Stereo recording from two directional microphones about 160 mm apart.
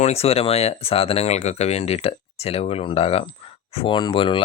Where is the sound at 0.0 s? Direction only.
40° left (ahead or behind).